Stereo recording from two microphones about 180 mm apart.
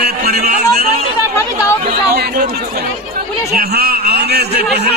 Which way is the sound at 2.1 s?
60° right (ahead or behind).